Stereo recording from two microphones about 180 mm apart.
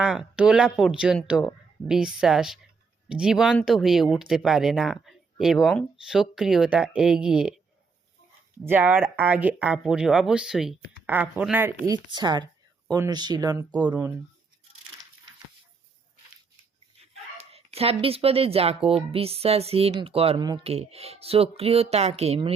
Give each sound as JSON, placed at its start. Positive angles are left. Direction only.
{"t": 0.0, "sound": "speech", "side_deg": -5}
{"t": 8.6, "sound": "speech", "side_deg": -10}
{"t": 11.9, "sound": "speech", "side_deg": -25}
{"t": 17.5, "sound": "speech", "side_deg": -35}